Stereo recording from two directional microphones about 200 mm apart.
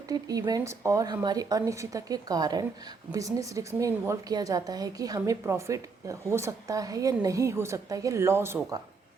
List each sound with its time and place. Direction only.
0.1 s a woman's voice: 20° right (ahead or behind)